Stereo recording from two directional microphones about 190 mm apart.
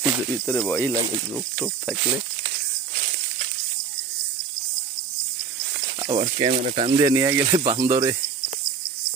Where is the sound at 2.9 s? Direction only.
45° right (ahead or behind).